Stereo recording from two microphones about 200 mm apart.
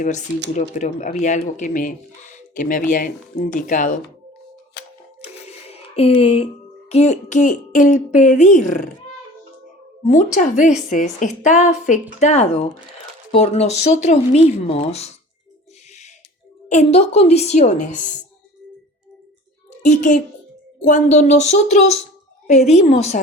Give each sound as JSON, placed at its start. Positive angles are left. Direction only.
{"t": 0.5, "sound": "speech", "side_deg": 35}
{"t": 5.2, "sound": "speech", "side_deg": 30}
{"t": 10.3, "sound": "speech", "side_deg": 35}
{"t": 16.6, "sound": "speech", "side_deg": 35}
{"t": 19.8, "sound": "speech", "side_deg": 40}